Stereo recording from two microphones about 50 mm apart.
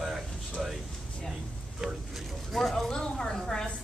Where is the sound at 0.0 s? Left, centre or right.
Centre.